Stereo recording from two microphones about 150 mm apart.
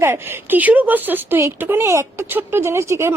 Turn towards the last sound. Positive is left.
turn(degrees=-20)  # may be behind; listen again after turning